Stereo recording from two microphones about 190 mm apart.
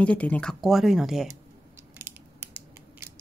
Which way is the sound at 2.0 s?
10° right (ahead or behind).